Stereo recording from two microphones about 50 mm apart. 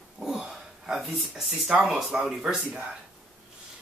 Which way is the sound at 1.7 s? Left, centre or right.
Centre.